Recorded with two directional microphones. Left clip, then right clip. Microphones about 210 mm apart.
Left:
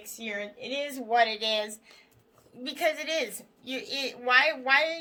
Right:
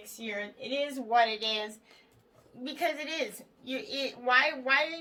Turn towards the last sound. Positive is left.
turn(degrees=45)  # may be behind; listen again after turning